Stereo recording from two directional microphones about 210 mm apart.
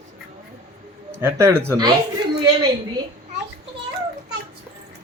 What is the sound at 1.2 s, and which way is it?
Speech, 10° right (ahead or behind).